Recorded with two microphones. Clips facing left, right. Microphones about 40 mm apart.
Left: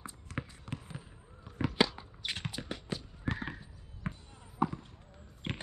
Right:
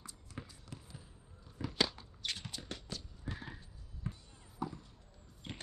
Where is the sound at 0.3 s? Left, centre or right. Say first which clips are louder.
Left 9 dB; left.